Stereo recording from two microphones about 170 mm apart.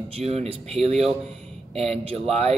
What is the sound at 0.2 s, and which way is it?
Speech, 35° right (ahead or behind).